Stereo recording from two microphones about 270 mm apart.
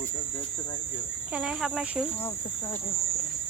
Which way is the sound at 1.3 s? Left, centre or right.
Centre.